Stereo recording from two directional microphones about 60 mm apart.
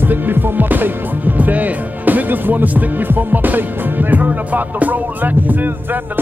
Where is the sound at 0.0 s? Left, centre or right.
Right.